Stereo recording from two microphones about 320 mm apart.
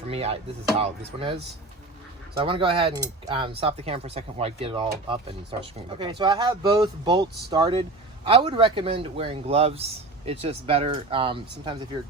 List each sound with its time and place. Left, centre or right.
0.1 s music: centre
0.8 s speech: centre